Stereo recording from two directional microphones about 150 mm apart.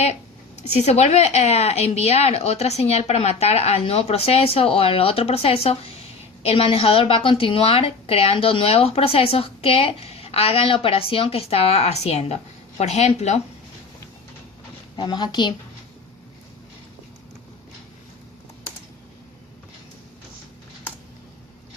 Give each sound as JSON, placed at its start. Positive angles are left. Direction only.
{"t": 0.0, "sound": "a woman's voice", "side_deg": 50}
{"t": 14.9, "sound": "a woman's voice", "side_deg": 30}